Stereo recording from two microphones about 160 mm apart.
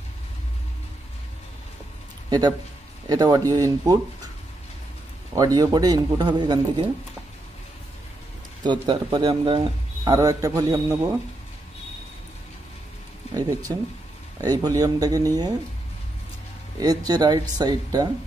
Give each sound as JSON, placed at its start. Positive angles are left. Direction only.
{"t": 2.2, "sound": "a man's voice", "side_deg": -25}
{"t": 5.3, "sound": "a man's voice", "side_deg": -20}
{"t": 8.8, "sound": "a man's voice", "side_deg": -30}
{"t": 13.4, "sound": "a man's voice", "side_deg": -20}
{"t": 16.8, "sound": "a man's voice", "side_deg": -25}